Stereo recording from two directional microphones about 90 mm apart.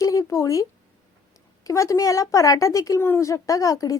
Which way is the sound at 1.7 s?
35° left (ahead or behind).